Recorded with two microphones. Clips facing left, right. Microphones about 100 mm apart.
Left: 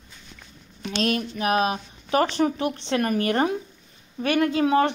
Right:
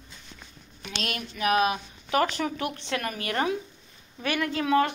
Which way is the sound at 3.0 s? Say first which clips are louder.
Left 7 dB; 40° left (ahead or behind).